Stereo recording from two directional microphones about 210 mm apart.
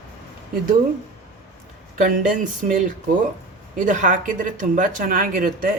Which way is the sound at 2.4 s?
40° right (ahead or behind).